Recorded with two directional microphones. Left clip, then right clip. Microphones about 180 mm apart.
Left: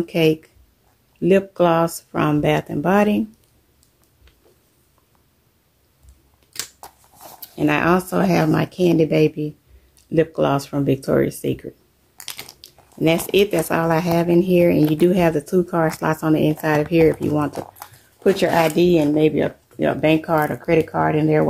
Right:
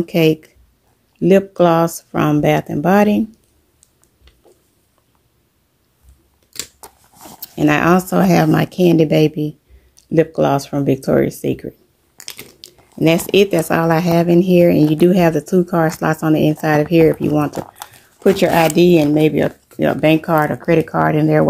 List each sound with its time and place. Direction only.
0.0 s speech: 35° right (ahead or behind)
6.5 s scissors: 10° right (ahead or behind)
7.3 s speech: 45° right (ahead or behind)
12.2 s a sound: 5° right (ahead or behind)
12.5 s biting: 40° right (ahead or behind)
13.3 s speech: 40° right (ahead or behind)
17.8 s speech: 45° right (ahead or behind)